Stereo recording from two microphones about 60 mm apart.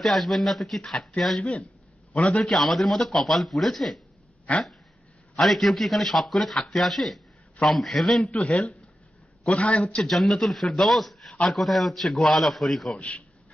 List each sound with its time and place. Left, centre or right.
0.0 s speech: centre
1.4 s a man's voice: centre
2.4 s speech: centre
5.3 s speech: centre
8.4 s a man's voice: centre
10.0 s speech: centre